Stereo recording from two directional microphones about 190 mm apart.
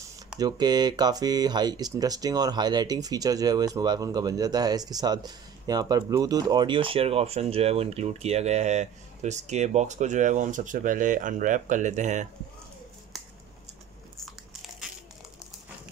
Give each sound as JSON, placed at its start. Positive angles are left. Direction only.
{"t": 0.4, "sound": "speech", "side_deg": -20}
{"t": 13.1, "sound": "scissors", "side_deg": 0}